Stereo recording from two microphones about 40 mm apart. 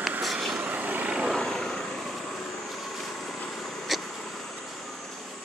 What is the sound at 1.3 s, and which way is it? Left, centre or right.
Vehicle, centre.